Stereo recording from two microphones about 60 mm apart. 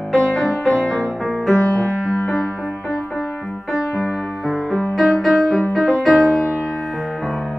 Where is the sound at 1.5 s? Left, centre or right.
Left.